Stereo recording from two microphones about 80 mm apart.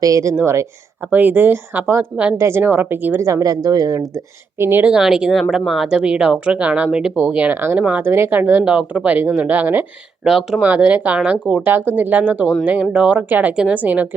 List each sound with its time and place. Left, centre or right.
0.0 s speech: right
1.1 s speech: right
3.2 s speech: right
4.1 s speech: right
4.8 s speech: centre
10.2 s speech: centre
10.6 s speech: centre
11.6 s speech: right